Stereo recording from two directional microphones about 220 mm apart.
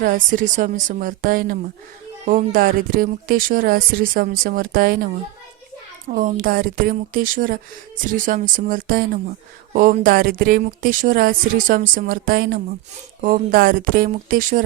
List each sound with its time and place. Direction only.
0.0 s speech: 40° right (ahead or behind)
6.1 s speech: 35° right (ahead or behind)